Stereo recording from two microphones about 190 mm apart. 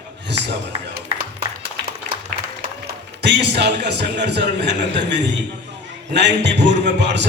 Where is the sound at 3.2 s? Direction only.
65° right (ahead or behind).